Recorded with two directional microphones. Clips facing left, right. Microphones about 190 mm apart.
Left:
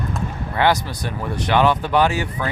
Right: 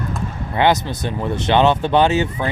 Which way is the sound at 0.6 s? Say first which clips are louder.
Right 2 dB; 20° right (ahead or behind).